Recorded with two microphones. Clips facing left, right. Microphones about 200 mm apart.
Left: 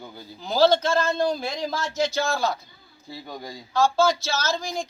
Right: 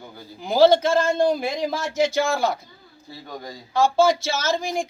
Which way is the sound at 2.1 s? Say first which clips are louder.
Right 3 dB; 55° right (ahead or behind).